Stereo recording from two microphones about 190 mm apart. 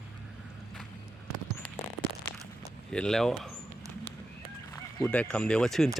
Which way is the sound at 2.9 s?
5° left (ahead or behind).